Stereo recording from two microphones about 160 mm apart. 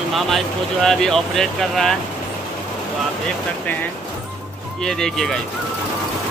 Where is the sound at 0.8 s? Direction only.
5° left (ahead or behind).